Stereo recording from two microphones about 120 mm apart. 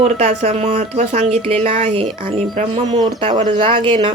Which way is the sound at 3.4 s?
45° right (ahead or behind).